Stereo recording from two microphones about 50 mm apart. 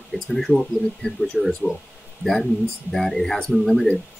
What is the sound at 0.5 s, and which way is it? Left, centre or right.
Speech, centre.